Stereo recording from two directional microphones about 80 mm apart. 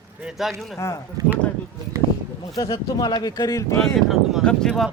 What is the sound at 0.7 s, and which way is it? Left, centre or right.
Speech, left.